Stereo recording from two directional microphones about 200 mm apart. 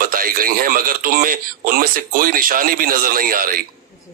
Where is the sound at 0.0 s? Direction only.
45° right (ahead or behind).